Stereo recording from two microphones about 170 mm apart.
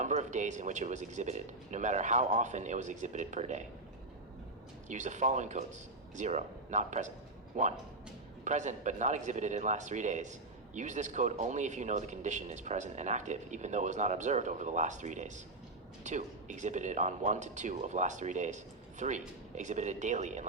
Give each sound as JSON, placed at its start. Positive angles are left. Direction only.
{"t": 0.0, "sound": "speech", "side_deg": -45}
{"t": 4.9, "sound": "speech", "side_deg": -45}